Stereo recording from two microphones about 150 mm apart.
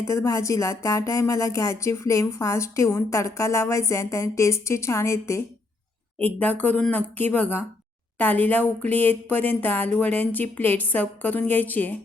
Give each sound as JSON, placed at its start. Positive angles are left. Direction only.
{"t": 0.0, "sound": "speech", "side_deg": 20}